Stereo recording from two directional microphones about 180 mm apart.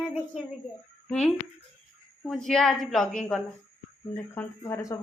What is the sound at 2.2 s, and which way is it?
Child singing, centre (ahead or behind).